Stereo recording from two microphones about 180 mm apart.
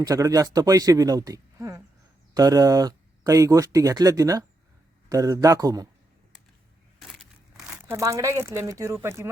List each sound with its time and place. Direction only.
0.0 s speech: 20° right (ahead or behind)
7.0 s crumpling: centre (ahead or behind)
7.9 s speech: 15° right (ahead or behind)